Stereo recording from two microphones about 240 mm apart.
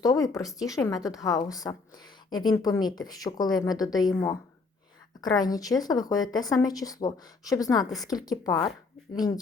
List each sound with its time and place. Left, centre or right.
0.0 s a woman's voice: centre